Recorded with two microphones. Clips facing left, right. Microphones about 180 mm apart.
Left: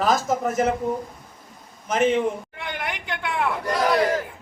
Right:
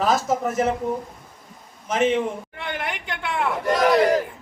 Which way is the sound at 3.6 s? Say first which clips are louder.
Right 4 dB; 20° right (ahead or behind).